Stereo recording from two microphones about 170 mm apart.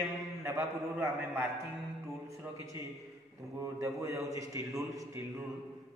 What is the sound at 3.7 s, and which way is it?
A man's voice, 20° right (ahead or behind).